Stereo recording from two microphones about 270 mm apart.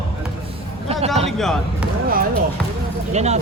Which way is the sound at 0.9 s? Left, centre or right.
Right.